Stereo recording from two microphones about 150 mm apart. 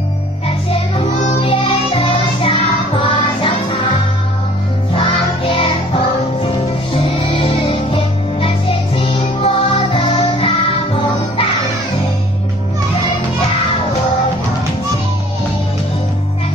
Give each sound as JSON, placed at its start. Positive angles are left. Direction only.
{"t": 0.7, "sound": "music", "side_deg": 40}
{"t": 5.6, "sound": "music", "side_deg": 35}